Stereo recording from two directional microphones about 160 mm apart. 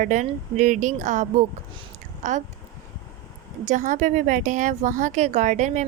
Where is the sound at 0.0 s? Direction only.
50° right (ahead or behind).